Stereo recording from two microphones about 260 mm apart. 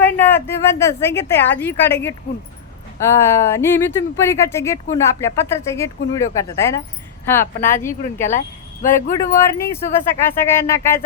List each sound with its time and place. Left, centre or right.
0.0 s speech: centre
8.3 s speech: left
9.1 s speech: centre